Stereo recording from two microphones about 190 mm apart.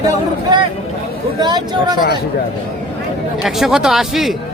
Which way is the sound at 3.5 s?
Centre (ahead or behind).